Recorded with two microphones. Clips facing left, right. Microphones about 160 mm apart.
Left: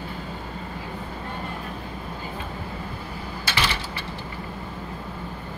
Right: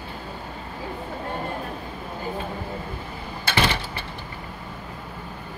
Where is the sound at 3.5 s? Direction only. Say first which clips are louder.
Right 4 dB; 55° right (ahead or behind).